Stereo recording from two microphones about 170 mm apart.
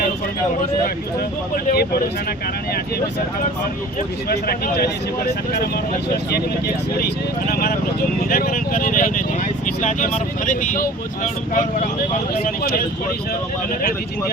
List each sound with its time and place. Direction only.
1.7 s speech: 65° left (ahead or behind)
4.3 s speech: 65° left (ahead or behind)
6.3 s speech: 65° left (ahead or behind); by 12.2 s 45° left (ahead or behind)
12.3 s speech: 60° left (ahead or behind)